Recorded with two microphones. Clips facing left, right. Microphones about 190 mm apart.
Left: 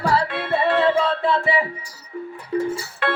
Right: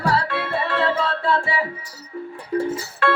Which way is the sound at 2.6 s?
15° left (ahead or behind).